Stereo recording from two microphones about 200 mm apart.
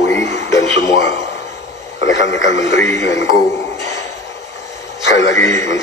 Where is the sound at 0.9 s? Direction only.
60° left (ahead or behind).